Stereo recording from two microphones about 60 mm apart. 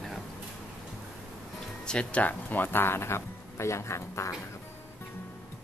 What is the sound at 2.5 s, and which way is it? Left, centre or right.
Speech, left.